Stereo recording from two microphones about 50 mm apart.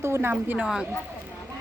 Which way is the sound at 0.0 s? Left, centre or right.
Right.